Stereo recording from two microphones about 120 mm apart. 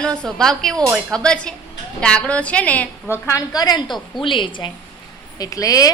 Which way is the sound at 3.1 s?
25° left (ahead or behind).